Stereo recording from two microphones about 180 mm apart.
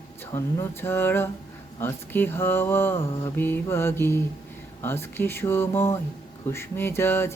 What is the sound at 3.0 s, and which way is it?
Mantra, 30° left (ahead or behind).